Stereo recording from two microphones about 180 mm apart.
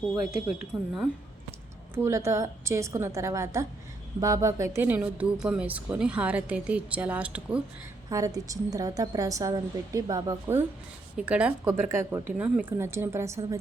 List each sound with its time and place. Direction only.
0.7 s speech: centre (ahead or behind)
2.0 s speech: 15° right (ahead or behind)
8.1 s a woman's voice: 20° right (ahead or behind)
11.2 s speech: 5° right (ahead or behind)